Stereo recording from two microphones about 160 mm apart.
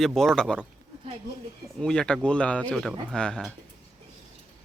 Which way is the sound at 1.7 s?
5° left (ahead or behind).